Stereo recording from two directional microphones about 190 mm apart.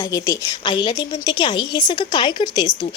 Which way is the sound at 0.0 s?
20° left (ahead or behind).